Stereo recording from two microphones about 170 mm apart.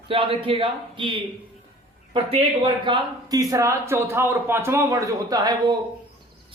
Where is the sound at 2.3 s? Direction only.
30° right (ahead or behind).